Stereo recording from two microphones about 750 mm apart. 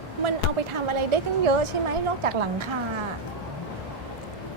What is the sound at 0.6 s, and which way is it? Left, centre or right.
A woman's voice, right.